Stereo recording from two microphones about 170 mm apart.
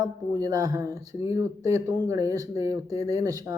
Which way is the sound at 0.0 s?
20° right (ahead or behind).